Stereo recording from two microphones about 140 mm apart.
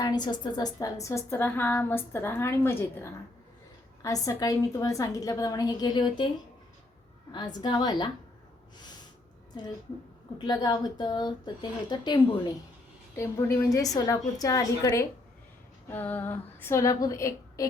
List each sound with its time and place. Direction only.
0.0 s a woman's voice: 30° left (ahead or behind)
7.6 s speech: 30° left (ahead or behind)
10.3 s speech: 30° left (ahead or behind)
13.1 s a woman's voice: 20° left (ahead or behind)